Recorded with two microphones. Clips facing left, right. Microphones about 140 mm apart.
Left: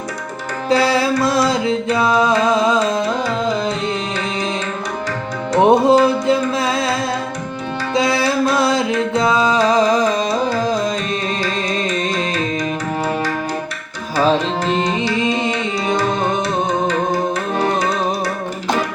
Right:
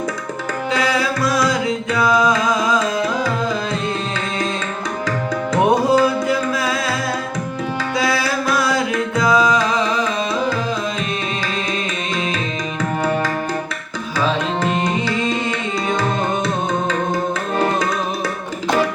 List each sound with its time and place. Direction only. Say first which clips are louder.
0.7 s music: left 5 dB; 30° left (ahead or behind)
5.5 s music: left 4 dB; 25° left (ahead or behind)
7.9 s music: left 5 dB; 25° left (ahead or behind)
14.2 s music: left 4 dB; 30° left (ahead or behind)